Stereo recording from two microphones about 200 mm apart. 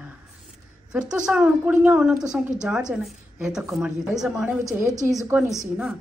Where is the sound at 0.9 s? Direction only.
5° right (ahead or behind).